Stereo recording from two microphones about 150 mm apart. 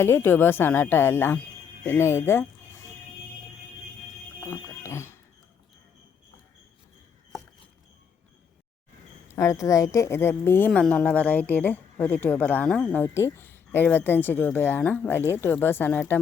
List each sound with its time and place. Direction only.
0.0 s speech: 15° left (ahead or behind)
4.4 s alarm clock: 15° left (ahead or behind)
9.3 s a woman's voice: 20° left (ahead or behind)